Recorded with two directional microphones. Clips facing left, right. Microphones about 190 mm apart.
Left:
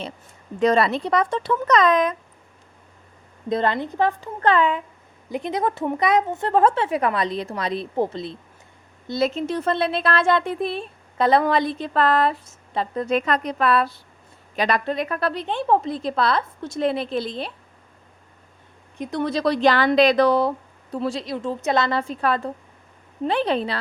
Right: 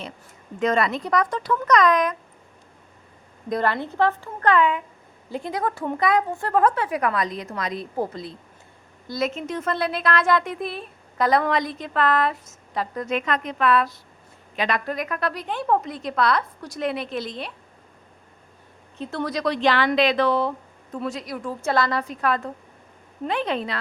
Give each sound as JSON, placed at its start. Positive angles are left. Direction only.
{"t": 0.6, "sound": "speech", "side_deg": 35}
{"t": 3.5, "sound": "a woman's voice", "side_deg": 20}
{"t": 4.4, "sound": "a woman's voice", "side_deg": 30}
{"t": 5.3, "sound": "a woman's voice", "side_deg": 20}
{"t": 14.8, "sound": "speech", "side_deg": 30}
{"t": 18.9, "sound": "a woman's voice", "side_deg": 15}
{"t": 19.3, "sound": "a woman's voice", "side_deg": 35}